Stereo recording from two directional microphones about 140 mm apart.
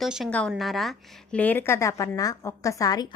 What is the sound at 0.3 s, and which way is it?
Speech, 10° left (ahead or behind).